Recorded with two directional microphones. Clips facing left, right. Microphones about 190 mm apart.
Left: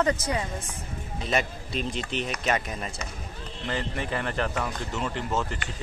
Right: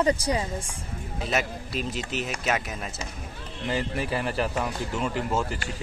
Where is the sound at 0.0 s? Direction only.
10° right (ahead or behind).